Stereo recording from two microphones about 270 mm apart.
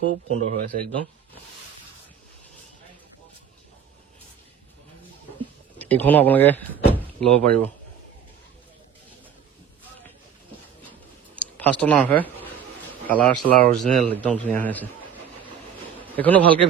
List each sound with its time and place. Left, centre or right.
0.1 s speech: right
5.8 s speech: centre
10.9 s a sound: centre
13.1 s a man's voice: centre
16.2 s a man's voice: centre